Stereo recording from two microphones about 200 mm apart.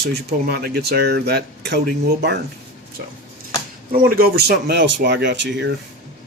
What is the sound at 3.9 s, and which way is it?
Speech, 45° right (ahead or behind).